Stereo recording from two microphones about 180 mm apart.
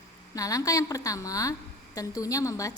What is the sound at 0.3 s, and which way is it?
A woman's voice, 20° left (ahead or behind).